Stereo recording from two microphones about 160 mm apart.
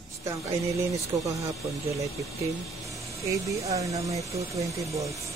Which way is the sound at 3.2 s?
20° right (ahead or behind).